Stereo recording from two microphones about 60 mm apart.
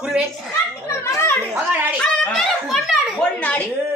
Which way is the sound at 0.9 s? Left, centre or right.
Left.